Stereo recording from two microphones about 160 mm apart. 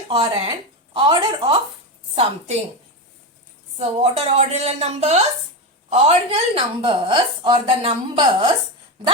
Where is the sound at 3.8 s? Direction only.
40° right (ahead or behind).